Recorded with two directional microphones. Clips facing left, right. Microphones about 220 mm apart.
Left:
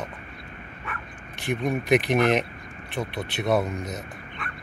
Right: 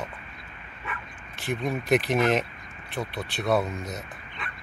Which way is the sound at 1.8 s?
20° left (ahead or behind).